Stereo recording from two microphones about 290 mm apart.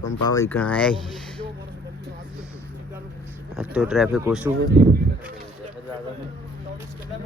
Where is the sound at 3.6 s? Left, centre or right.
Centre.